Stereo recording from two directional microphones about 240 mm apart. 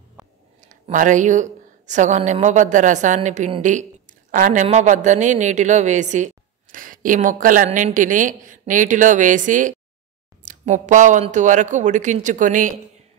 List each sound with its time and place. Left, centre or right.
0.6 s a woman's voice: right